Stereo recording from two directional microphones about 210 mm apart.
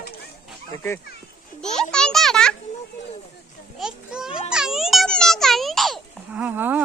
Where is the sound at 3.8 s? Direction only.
5° right (ahead or behind).